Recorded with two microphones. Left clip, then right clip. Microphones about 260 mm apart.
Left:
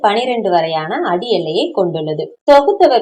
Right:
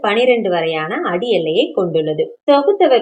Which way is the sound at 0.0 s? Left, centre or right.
Left.